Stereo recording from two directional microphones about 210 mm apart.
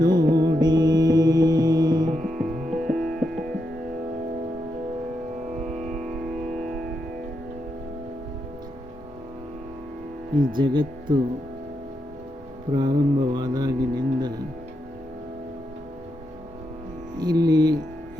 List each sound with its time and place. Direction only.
0.0 s music: 20° right (ahead or behind)
2.4 s music: centre (ahead or behind)
5.8 s music: centre (ahead or behind)
10.3 s speech: 20° right (ahead or behind)
12.7 s speech: 20° right (ahead or behind)
17.2 s speech: 20° right (ahead or behind)